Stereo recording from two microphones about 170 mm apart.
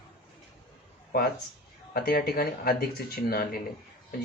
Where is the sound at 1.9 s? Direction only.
60° left (ahead or behind).